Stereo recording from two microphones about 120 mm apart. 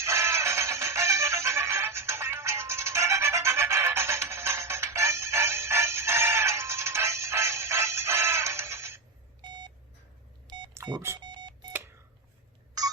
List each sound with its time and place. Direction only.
0.0 s music: 20° right (ahead or behind)
9.4 s beep: 35° right (ahead or behind)
10.4 s a sound: 40° right (ahead or behind)